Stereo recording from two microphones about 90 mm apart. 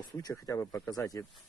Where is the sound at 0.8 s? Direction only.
45° left (ahead or behind).